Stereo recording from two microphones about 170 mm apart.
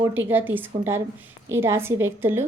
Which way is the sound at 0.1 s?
10° right (ahead or behind).